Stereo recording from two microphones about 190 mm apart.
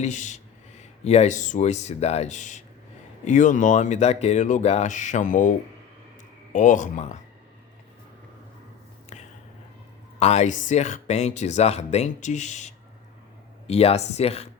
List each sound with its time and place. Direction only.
0.0 s speech: 40° left (ahead or behind)
10.2 s speech: 35° left (ahead or behind)